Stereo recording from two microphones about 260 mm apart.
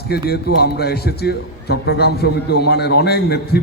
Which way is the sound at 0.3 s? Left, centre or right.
Left.